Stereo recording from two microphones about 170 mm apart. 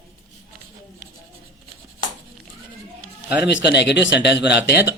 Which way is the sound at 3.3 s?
90° left.